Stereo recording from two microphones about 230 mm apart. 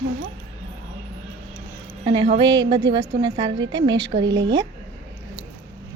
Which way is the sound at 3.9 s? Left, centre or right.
Right.